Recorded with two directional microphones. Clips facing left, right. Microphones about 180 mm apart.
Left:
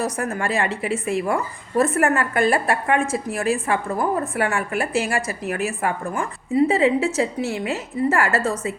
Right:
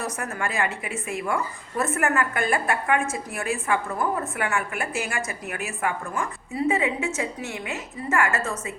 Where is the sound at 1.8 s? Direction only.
35° left (ahead or behind).